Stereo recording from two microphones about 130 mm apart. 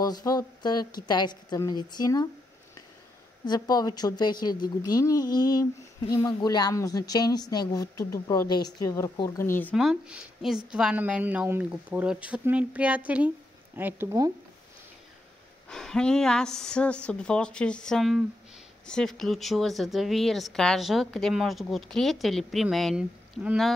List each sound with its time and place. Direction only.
0.0 s a woman's voice: 30° left (ahead or behind)
3.4 s a woman's voice: 30° left (ahead or behind); by 9.8 s 15° left (ahead or behind)
9.8 s a woman's voice: 5° right (ahead or behind)
15.7 s a woman's voice: 5° left (ahead or behind)